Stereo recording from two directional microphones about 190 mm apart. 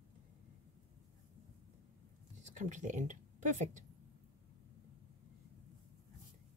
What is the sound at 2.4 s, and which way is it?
Speech, 40° right (ahead or behind).